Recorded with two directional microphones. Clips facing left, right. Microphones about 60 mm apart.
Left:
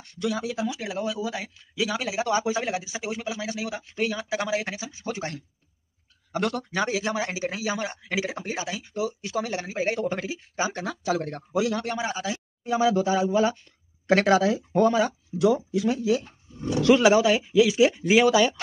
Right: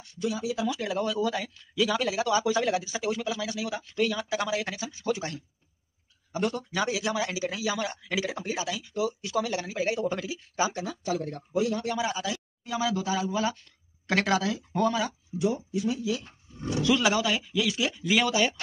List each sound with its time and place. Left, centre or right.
0.2 s speech: left
0.7 s speech: centre
2.2 s speech: left
6.3 s speech: left
6.7 s a man's voice: left
10.9 s speech: left
11.8 s a man's voice: left
15.3 s speech: left
16.0 s a man's voice: left
16.9 s speech: left
17.7 s speech: left